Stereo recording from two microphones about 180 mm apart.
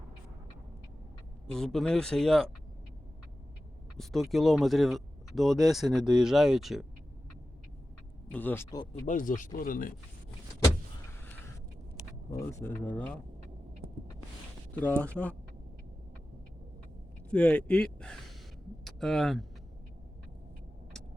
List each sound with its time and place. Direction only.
1.5 s speech: 5° left (ahead or behind)
3.9 s speech: centre (ahead or behind)
8.3 s speech: 10° left (ahead or behind)
8.9 s speech: 45° left (ahead or behind)
12.3 s speech: 15° left (ahead or behind)
14.7 s speech: 10° left (ahead or behind)
17.2 s speech: 5° left (ahead or behind)